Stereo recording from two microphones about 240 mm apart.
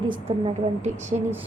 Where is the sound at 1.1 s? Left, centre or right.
Right.